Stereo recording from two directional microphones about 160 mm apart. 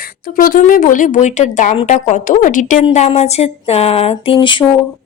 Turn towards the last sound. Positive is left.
turn(degrees=30)  # may be behind; listen again after turning